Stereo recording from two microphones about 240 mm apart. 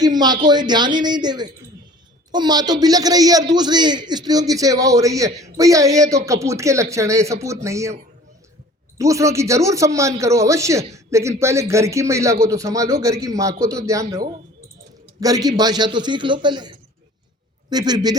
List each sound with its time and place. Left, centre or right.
0.0 s a man's voice: centre
9.0 s a man's voice: centre
15.2 s a man's voice: centre